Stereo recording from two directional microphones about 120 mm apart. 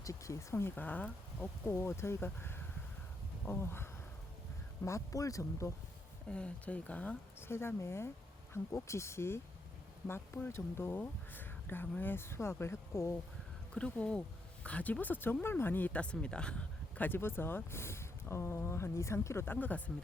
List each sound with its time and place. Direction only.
0.0 s speech: 25° left (ahead or behind)
4.9 s speech: 25° left (ahead or behind)
6.2 s speech: 10° left (ahead or behind)
13.7 s speech: 10° left (ahead or behind)